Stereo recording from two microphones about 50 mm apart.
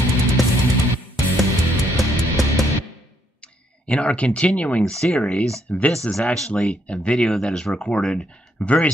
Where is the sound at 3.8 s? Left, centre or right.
Left.